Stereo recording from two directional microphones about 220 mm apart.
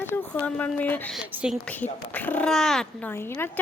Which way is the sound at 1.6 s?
10° left (ahead or behind).